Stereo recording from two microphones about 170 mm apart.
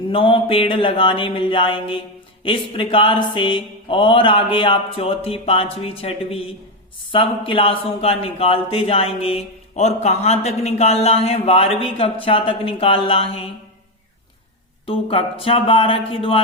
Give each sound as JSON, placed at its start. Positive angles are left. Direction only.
{"t": 0.1, "sound": "speech", "side_deg": 30}
{"t": 14.8, "sound": "speech", "side_deg": 35}